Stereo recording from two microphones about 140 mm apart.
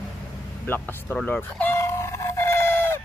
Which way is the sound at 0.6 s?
15° left (ahead or behind).